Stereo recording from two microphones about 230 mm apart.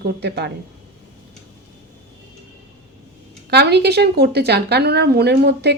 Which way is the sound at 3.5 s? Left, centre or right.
Right.